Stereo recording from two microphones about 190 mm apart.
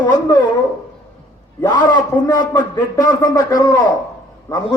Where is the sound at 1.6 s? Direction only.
20° left (ahead or behind).